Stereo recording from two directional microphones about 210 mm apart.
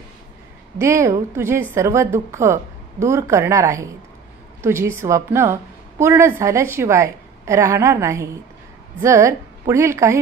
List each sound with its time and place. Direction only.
0.7 s a woman's voice: 15° right (ahead or behind)